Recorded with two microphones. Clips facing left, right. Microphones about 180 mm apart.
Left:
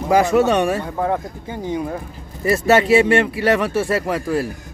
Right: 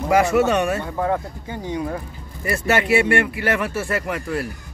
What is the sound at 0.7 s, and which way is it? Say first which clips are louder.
Speech: left 1 dB; 5° left (ahead or behind).